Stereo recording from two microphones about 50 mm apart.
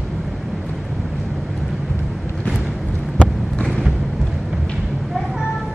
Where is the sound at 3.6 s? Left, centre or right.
Centre.